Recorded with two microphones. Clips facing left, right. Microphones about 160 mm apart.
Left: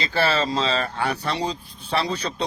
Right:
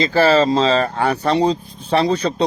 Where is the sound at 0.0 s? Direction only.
40° right (ahead or behind).